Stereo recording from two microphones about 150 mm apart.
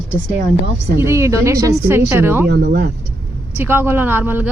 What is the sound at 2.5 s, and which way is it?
Speech, 90° right.